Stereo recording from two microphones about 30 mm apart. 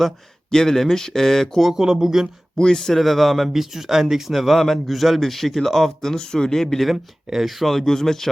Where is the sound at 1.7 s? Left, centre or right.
Centre.